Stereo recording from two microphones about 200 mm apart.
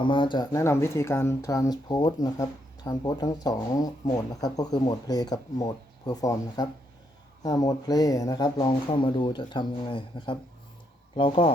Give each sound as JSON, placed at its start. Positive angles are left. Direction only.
{"t": 0.0, "sound": "speech", "side_deg": 25}